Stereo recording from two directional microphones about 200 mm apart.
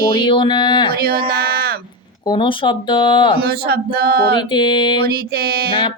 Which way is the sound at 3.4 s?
50° right (ahead or behind).